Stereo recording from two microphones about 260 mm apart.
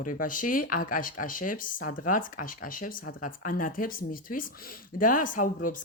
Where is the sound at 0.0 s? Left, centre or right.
Left.